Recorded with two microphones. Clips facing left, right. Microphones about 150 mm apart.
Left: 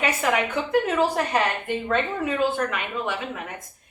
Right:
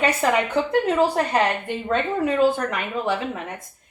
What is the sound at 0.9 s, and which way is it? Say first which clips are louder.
Speech: right 3 dB; 35° right (ahead or behind).